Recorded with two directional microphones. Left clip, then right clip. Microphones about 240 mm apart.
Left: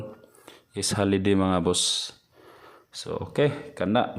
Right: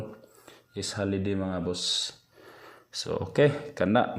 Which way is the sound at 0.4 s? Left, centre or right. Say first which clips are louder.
Left 5 dB; centre.